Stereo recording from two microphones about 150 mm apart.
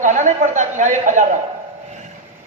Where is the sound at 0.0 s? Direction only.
55° right (ahead or behind).